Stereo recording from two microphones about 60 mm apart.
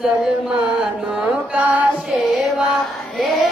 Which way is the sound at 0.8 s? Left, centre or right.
Centre.